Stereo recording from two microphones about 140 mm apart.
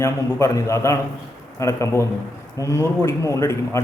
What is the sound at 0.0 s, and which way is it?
A man's voice, 20° left (ahead or behind).